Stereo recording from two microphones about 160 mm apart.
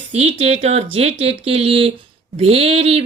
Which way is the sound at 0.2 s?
40° right (ahead or behind).